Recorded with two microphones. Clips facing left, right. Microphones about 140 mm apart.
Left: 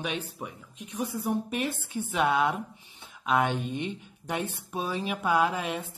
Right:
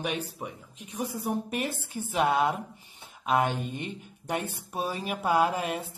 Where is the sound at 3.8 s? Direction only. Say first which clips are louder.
Left 3 dB; 45° right (ahead or behind).